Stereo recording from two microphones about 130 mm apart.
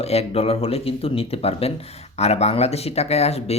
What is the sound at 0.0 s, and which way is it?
Speech, 50° left (ahead or behind).